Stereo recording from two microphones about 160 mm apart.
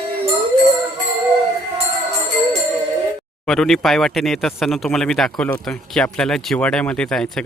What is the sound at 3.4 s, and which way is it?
Speech, centre (ahead or behind).